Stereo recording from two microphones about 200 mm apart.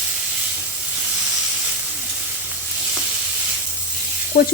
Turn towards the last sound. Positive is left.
turn(degrees=45)  # may be behind; listen again after turning